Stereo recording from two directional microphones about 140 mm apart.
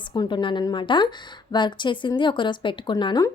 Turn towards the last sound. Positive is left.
turn(degrees=30)  # may be behind; listen again after turning